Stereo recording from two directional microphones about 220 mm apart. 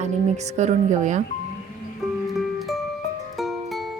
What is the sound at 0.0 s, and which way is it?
Speech, 30° right (ahead or behind).